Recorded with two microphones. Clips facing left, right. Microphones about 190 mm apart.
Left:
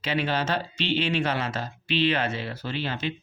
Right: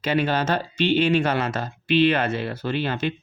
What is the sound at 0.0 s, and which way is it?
Speech, 45° right (ahead or behind).